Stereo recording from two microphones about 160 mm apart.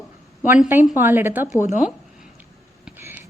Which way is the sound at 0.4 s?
10° right (ahead or behind).